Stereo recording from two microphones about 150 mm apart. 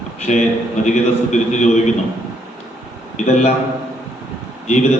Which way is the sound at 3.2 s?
50° left (ahead or behind).